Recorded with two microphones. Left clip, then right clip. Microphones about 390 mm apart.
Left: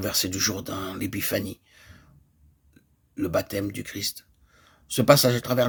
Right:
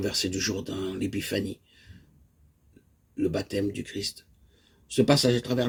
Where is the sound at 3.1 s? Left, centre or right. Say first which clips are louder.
Left 2 dB; left.